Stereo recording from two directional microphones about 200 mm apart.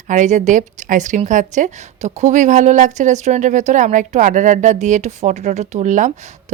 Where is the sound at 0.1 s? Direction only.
40° right (ahead or behind).